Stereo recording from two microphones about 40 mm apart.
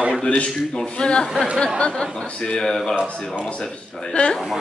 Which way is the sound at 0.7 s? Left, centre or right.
Left.